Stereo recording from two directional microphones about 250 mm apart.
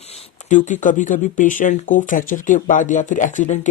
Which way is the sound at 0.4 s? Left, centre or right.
Left.